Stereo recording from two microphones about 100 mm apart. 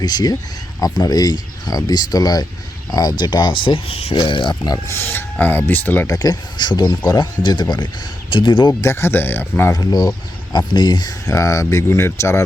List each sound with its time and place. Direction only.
0.0 s speech: 40° left (ahead or behind); by 4.1 s 75° left (ahead or behind)
4.1 s speech: 50° left (ahead or behind)
4.9 s speech: 25° left (ahead or behind)
6.1 s speech: 40° left (ahead or behind)
8.8 s speech: 25° left (ahead or behind)
9.7 s speech: 40° left (ahead or behind)